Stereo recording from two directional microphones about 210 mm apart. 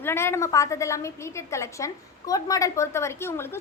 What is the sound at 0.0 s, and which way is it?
A woman's voice, 10° left (ahead or behind).